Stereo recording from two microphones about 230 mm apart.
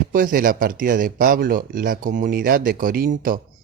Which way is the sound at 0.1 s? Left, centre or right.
Right.